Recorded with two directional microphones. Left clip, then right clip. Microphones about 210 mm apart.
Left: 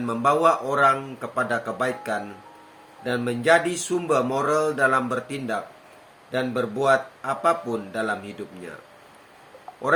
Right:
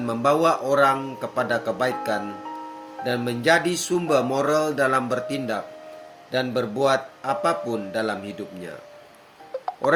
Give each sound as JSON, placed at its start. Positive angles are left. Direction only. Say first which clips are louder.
{"t": 0.0, "sound": "speech", "louder": "even", "side_deg": -55}